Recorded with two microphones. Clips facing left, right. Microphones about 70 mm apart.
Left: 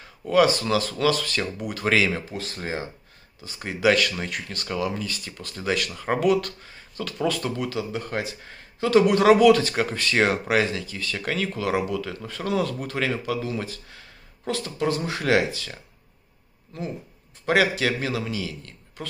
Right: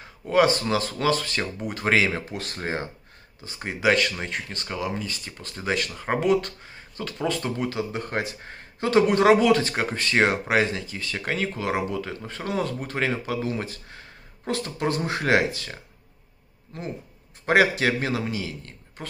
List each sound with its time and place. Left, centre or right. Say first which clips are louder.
0.3 s speech: left 1 dB; right
2.3 s speech: right 1 dB; right
3.4 s speech: left 1 dB; right
7.9 s speech: even; right